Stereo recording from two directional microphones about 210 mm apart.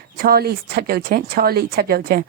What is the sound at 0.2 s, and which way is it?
Speech, 45° right (ahead or behind).